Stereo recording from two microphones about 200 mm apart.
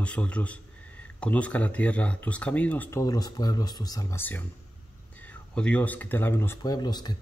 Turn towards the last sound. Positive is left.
turn(degrees=20)  # may be behind; listen again after turning